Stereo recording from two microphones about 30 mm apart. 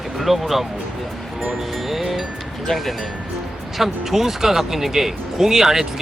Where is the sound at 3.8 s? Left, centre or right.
Centre.